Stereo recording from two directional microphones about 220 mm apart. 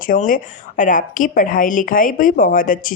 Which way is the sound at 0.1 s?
40° left (ahead or behind).